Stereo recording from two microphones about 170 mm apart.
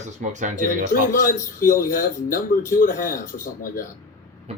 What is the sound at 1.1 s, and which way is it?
Speech, 55° left (ahead or behind).